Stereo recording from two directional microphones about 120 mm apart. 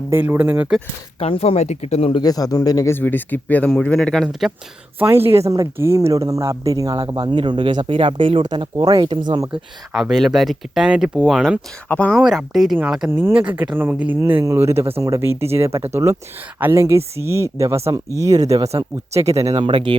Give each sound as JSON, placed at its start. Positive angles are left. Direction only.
{"t": 0.1, "sound": "speech", "side_deg": -20}
{"t": 1.2, "sound": "speech", "side_deg": 55}
{"t": 2.2, "sound": "speech", "side_deg": 30}
{"t": 2.9, "sound": "speech", "side_deg": 15}
{"t": 4.9, "sound": "speech", "side_deg": -20}
{"t": 9.5, "sound": "speech", "side_deg": -5}
{"t": 11.9, "sound": "speech", "side_deg": 10}
{"t": 12.2, "sound": "speech", "side_deg": -5}
{"t": 13.1, "sound": "speech", "side_deg": -20}
{"t": 19.5, "sound": "speech", "side_deg": -45}